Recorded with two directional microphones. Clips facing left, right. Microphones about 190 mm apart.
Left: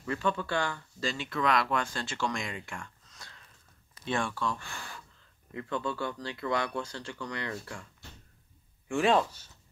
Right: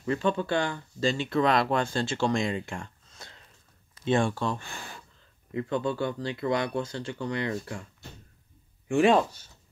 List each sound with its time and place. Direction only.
0.0 s speech: 25° right (ahead or behind)
8.8 s speech: 15° right (ahead or behind)